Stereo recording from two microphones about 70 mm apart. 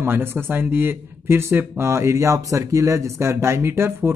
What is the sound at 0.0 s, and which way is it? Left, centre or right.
Speech, right.